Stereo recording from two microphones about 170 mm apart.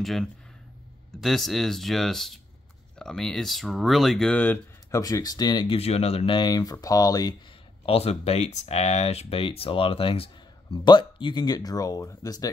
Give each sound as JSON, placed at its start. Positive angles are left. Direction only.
{"t": 0.0, "sound": "speech", "side_deg": 0}
{"t": 7.8, "sound": "speech", "side_deg": 35}